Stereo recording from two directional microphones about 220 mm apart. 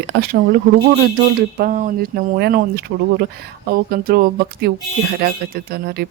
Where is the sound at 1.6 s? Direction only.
35° right (ahead or behind).